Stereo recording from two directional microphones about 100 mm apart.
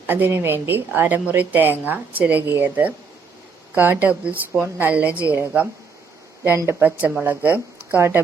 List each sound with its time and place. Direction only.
0.1 s a woman's voice: 20° right (ahead or behind)